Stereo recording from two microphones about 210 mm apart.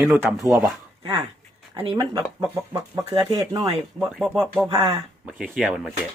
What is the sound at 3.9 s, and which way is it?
Speech, centre (ahead or behind).